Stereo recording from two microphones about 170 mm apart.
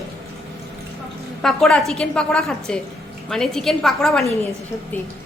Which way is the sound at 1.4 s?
5° left (ahead or behind).